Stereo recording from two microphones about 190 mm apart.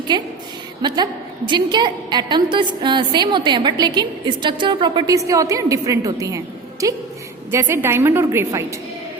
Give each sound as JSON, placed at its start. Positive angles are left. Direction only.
{"t": 0.1, "sound": "a woman's voice", "side_deg": -20}